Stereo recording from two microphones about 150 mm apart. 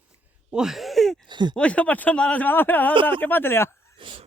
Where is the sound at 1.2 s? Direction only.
30° right (ahead or behind).